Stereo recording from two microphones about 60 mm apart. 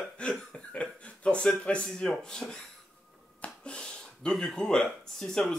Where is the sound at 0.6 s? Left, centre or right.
Centre.